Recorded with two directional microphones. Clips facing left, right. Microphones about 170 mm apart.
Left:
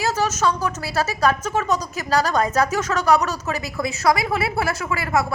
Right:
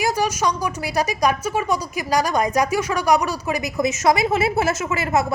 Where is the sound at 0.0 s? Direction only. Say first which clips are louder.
Even; 15° right (ahead or behind).